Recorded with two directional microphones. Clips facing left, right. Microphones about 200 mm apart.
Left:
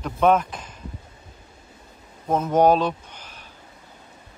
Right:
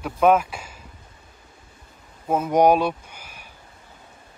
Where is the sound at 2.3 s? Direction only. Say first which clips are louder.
Even; 10° right (ahead or behind).